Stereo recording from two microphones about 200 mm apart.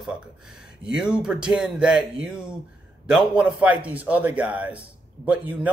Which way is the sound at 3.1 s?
Centre (ahead or behind).